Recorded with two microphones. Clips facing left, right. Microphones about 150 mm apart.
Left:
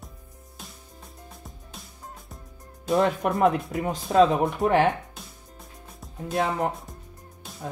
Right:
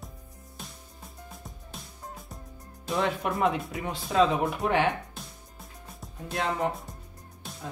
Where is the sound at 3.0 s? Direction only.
45° left (ahead or behind).